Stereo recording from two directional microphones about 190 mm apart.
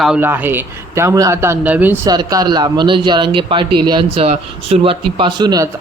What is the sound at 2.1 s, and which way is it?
A man's voice, 20° right (ahead or behind).